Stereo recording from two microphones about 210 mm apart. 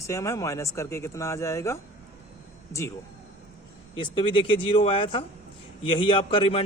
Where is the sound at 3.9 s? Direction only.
25° left (ahead or behind).